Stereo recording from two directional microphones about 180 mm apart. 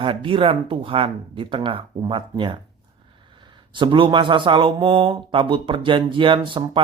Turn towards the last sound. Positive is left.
turn(degrees=-25)  # may be behind; listen again after turning